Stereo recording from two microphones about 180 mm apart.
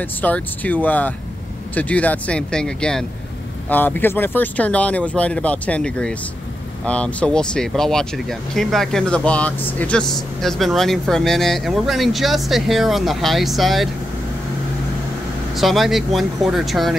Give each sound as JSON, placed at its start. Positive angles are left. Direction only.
{"t": 0.0, "sound": "speech", "side_deg": 10}
{"t": 15.5, "sound": "speech", "side_deg": 0}